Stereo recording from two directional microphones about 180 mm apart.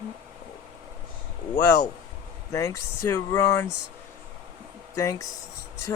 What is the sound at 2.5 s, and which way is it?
Speech, 15° left (ahead or behind).